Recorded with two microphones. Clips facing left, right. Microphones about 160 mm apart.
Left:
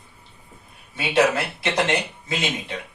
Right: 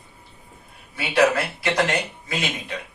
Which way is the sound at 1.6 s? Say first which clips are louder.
Left 1 dB; 20° left (ahead or behind).